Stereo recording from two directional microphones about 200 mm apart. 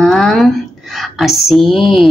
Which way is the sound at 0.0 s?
5° left (ahead or behind).